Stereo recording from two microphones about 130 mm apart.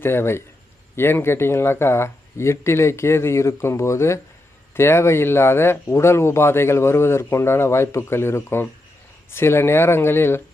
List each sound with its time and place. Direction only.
0.0 s speech: 20° left (ahead or behind)